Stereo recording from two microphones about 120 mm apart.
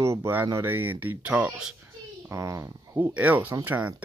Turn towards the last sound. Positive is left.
turn(degrees=-15)  # may be behind; listen again after turning